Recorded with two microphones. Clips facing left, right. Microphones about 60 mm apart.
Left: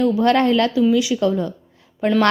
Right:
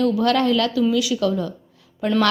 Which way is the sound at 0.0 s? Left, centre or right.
Left.